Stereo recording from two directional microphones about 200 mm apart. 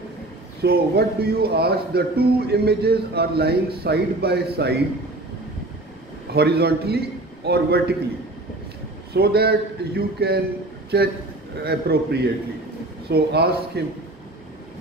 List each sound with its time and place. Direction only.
0.6 s speech: 50° right (ahead or behind)
6.3 s a man's voice: 55° right (ahead or behind)
9.1 s a man's voice: 50° right (ahead or behind)